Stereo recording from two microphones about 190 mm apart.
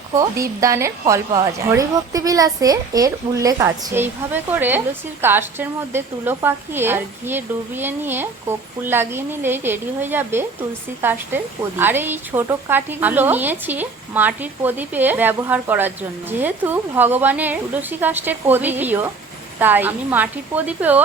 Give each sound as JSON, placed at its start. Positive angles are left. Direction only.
{"t": 0.2, "sound": "a woman's voice", "side_deg": -15}